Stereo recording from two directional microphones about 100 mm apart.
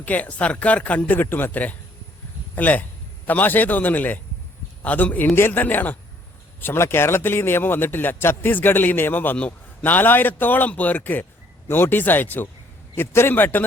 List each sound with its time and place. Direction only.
0.0 s a man's voice: 15° left (ahead or behind)